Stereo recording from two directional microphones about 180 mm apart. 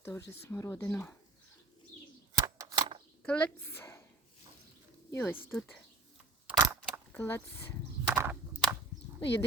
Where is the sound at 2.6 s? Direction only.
20° right (ahead or behind).